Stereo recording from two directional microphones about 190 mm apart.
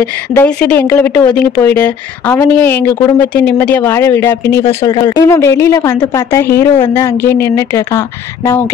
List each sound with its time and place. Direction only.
0.0 s speech: 5° left (ahead or behind)